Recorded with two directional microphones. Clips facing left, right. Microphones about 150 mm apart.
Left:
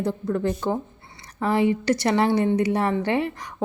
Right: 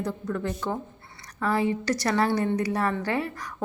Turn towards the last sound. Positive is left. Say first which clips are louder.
# left 4 dB
turn(degrees=25)  # may be behind; listen again after turning